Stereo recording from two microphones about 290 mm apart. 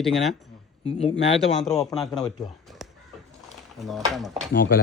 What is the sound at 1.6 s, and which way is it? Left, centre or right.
Speech, centre.